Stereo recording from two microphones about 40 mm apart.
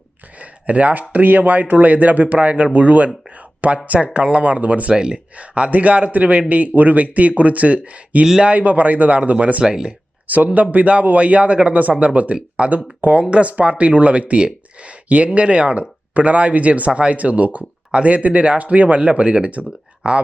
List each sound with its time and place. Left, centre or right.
0.3 s speech: right
4.1 s speech: right
4.9 s speech: right
5.4 s speech: right
9.6 s speech: centre
10.2 s speech: right